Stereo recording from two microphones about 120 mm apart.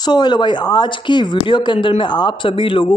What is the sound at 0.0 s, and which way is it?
Speech, 35° left (ahead or behind).